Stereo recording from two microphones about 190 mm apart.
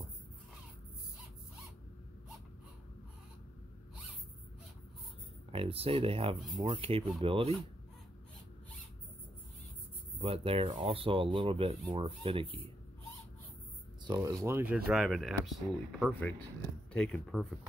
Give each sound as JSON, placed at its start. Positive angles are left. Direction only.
{"t": 5.5, "sound": "speech", "side_deg": -30}
{"t": 10.1, "sound": "speech", "side_deg": -30}
{"t": 14.0, "sound": "speech", "side_deg": -20}